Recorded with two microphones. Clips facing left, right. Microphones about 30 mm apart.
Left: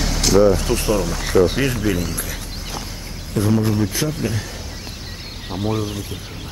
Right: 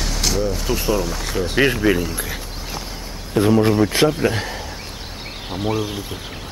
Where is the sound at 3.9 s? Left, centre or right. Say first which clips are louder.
Right 7 dB; right.